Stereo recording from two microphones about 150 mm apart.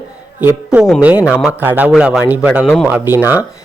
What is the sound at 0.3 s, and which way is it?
A man's voice, 10° right (ahead or behind).